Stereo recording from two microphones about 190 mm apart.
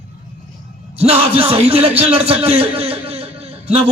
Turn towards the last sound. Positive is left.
turn(degrees=-30)  # may be behind; listen again after turning